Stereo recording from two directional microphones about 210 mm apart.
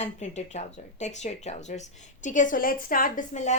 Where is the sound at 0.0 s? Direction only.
35° left (ahead or behind).